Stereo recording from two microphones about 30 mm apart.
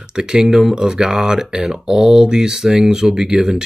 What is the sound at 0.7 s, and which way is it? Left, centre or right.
Speech, right.